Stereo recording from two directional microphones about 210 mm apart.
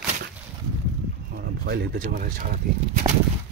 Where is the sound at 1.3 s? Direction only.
50° right (ahead or behind).